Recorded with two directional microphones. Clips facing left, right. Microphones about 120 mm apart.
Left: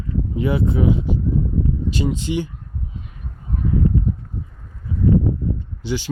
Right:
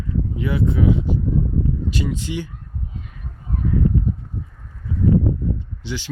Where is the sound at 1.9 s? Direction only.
25° left (ahead or behind).